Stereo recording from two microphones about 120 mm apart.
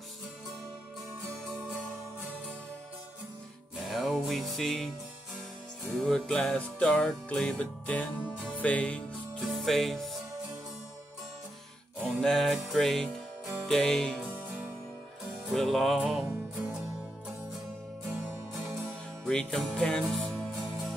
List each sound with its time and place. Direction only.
3.7 s music: centre (ahead or behind)
5.9 s music: 5° left (ahead or behind)
12.0 s music: 5° left (ahead or behind)
15.5 s music: centre (ahead or behind)
19.2 s music: 5° left (ahead or behind)